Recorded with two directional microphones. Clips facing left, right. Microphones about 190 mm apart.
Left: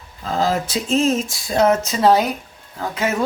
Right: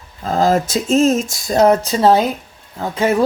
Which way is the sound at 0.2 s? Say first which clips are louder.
Right 5 dB; 45° right (ahead or behind).